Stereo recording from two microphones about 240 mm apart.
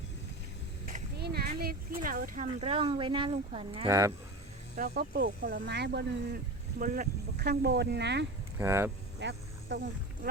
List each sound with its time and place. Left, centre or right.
0.9 s speech: right; by 4.1 s centre
4.8 s speech: right
8.5 s speech: centre
9.2 s speech: right